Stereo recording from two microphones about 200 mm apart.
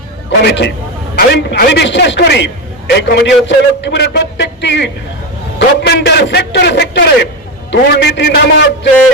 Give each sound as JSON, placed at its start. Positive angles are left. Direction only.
{"t": 0.4, "sound": "a man's voice", "side_deg": 60}